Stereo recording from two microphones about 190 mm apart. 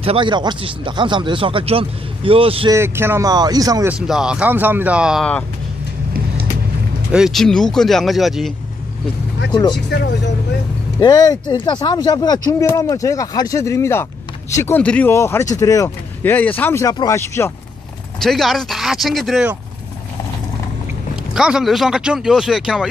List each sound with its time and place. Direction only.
0.0 s speech: 30° right (ahead or behind)
2.7 s speech: 15° right (ahead or behind)
3.9 s speech: 5° right (ahead or behind)
7.1 s speech: centre (ahead or behind)
9.5 s speech: 25° left (ahead or behind)
9.8 s speech: 65° left (ahead or behind)
11.0 s speech: 20° left (ahead or behind)
18.2 s speech: centre (ahead or behind)
21.3 s speech: 5° right (ahead or behind)